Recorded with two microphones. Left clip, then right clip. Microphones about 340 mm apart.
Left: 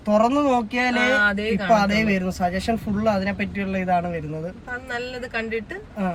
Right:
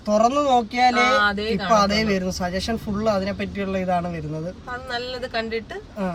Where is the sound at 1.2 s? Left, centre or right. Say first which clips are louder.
Even; centre.